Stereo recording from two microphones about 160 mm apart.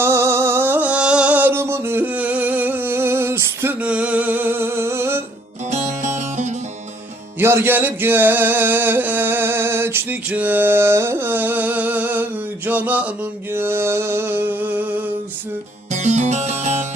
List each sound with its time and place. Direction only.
0.0 s a sound: 15° right (ahead or behind)
5.7 s music: 50° right (ahead or behind)
7.3 s music: 15° right (ahead or behind)
15.9 s music: 45° right (ahead or behind)